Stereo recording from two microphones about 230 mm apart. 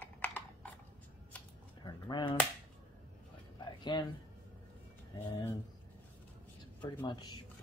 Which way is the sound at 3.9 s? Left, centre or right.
Centre.